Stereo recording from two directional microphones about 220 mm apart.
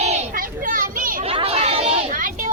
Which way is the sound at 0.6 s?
40° right (ahead or behind).